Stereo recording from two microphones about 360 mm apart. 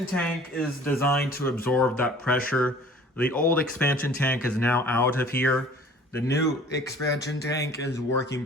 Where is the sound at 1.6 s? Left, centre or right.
Centre.